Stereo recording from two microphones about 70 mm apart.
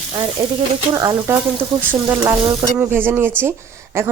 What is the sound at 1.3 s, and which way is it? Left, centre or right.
Speech, right.